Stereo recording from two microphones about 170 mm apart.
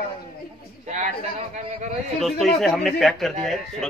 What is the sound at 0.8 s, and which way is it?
Speech, 45° right (ahead or behind).